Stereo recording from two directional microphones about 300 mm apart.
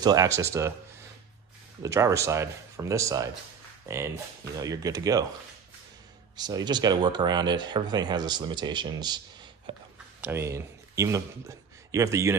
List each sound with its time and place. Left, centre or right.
0.0 s speech: centre
1.8 s speech: centre
6.3 s a man's voice: centre